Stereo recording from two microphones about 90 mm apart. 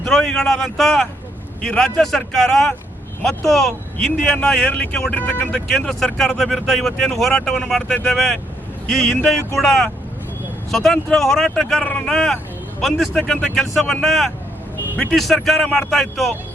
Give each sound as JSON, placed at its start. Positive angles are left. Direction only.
{"t": 0.0, "sound": "speech", "side_deg": 0}
{"t": 5.7, "sound": "speech", "side_deg": 5}